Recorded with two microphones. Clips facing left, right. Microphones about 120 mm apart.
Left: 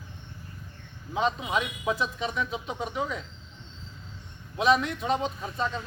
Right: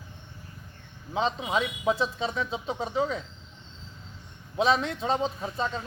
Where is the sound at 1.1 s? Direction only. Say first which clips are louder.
Even; 25° right (ahead or behind).